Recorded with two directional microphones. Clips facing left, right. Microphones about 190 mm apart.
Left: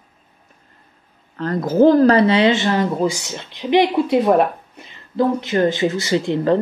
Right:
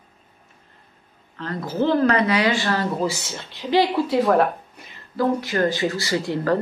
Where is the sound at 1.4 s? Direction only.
45° left (ahead or behind).